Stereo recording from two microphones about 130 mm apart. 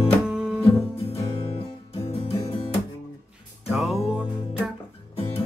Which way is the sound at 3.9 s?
50° left (ahead or behind).